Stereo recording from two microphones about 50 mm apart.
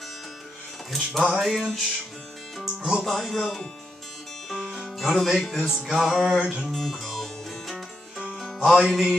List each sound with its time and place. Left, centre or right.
1.2 s speech: centre
2.6 s speech: centre
3.1 s speech: centre
4.5 s music: centre
5.9 s speech: centre
6.4 s music: centre
6.7 s music: centre